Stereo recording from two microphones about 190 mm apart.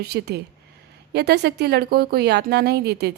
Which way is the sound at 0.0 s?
60° right (ahead or behind).